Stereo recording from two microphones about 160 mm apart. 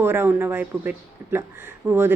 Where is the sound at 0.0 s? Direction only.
15° right (ahead or behind).